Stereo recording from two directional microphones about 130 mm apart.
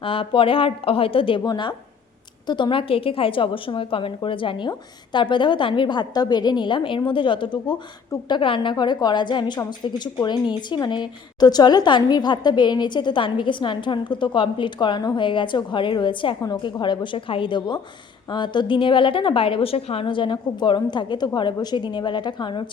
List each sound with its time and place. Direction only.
0.0 s a woman's voice: 45° left (ahead or behind)